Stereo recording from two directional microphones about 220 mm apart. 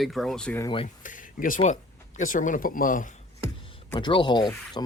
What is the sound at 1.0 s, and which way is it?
Speech, 35° left (ahead or behind).